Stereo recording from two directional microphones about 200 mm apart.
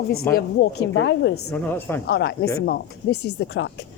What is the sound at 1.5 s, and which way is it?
Speech, 10° left (ahead or behind).